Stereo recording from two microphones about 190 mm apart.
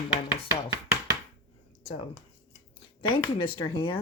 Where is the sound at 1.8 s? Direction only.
25° left (ahead or behind).